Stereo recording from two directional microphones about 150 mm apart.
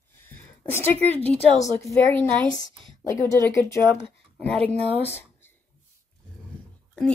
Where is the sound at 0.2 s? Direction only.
15° left (ahead or behind).